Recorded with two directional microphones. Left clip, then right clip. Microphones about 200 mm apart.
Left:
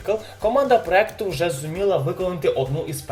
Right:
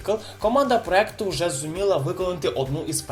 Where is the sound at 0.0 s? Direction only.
15° right (ahead or behind).